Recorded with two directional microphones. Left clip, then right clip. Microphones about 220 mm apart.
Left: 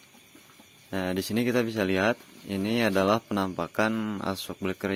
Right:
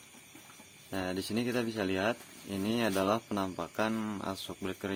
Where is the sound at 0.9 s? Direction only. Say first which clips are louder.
Left 5 dB; 35° left (ahead or behind).